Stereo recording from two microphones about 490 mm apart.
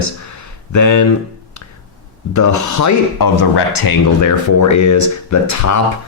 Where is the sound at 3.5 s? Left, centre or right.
Left.